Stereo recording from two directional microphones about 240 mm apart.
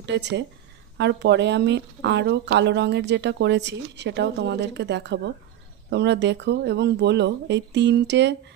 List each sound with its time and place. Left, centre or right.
0.0 s speech: right